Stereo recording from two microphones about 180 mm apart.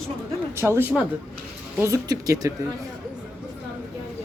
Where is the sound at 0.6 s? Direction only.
15° right (ahead or behind).